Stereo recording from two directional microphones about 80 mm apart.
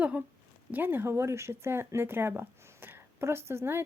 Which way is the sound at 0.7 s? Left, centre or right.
Right.